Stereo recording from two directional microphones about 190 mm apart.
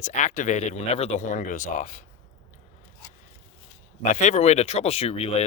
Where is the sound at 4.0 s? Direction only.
40° left (ahead or behind).